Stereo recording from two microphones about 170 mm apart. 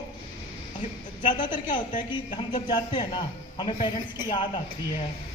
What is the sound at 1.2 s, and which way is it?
A man's voice, 25° left (ahead or behind).